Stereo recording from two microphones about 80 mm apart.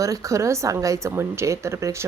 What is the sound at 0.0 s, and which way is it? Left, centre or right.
Speech, right.